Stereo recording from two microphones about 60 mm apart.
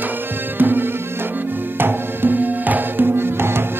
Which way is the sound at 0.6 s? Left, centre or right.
Right.